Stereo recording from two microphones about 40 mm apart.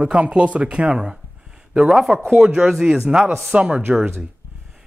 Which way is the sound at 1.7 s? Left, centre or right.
Centre.